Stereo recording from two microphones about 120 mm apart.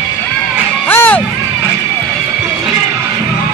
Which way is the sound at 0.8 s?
15° left (ahead or behind).